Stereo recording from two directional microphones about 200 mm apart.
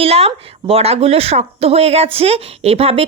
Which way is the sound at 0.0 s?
30° right (ahead or behind).